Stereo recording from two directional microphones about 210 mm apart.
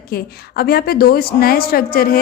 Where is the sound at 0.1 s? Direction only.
45° left (ahead or behind).